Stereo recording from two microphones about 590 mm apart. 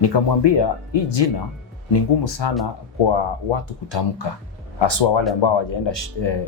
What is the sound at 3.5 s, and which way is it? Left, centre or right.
Speech, left.